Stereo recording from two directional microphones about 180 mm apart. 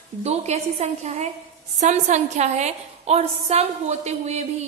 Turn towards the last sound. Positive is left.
turn(degrees=-35)  # may be behind; listen again after turning